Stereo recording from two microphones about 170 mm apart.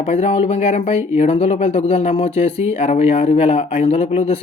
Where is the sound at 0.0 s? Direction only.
35° left (ahead or behind).